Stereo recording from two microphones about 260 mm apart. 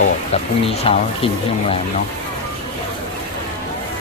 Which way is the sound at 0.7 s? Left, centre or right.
Left.